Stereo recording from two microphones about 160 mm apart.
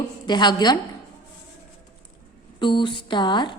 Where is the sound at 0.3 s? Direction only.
25° left (ahead or behind).